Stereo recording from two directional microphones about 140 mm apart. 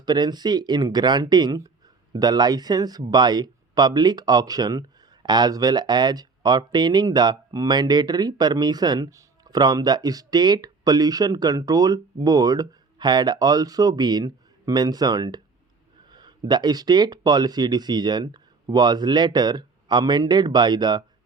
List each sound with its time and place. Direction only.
0.0 s speech: 30° right (ahead or behind)